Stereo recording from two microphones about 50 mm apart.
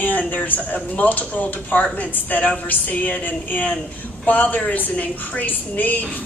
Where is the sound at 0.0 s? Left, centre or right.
Left.